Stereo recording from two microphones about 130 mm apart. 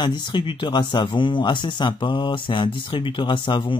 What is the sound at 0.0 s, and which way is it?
Speech, 35° left (ahead or behind).